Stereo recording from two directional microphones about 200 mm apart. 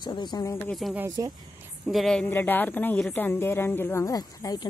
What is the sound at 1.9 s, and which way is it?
Speech, centre (ahead or behind).